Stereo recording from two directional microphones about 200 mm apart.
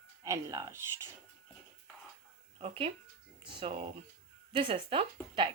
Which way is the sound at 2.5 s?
30° right (ahead or behind).